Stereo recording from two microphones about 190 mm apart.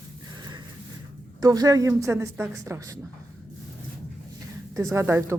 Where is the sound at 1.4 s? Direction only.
20° right (ahead or behind).